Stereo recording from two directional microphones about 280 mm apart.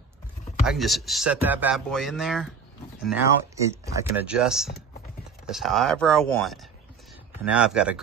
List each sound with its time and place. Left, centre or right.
0.7 s speech: centre